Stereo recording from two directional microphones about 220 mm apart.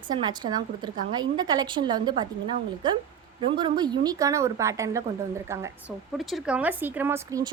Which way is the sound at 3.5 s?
20° right (ahead or behind).